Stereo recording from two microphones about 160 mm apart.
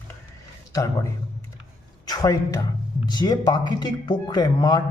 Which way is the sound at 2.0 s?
20° left (ahead or behind).